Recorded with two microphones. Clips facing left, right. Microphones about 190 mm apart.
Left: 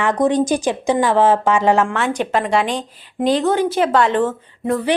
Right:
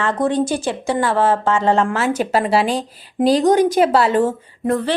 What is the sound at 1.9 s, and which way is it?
Speech, 5° right (ahead or behind).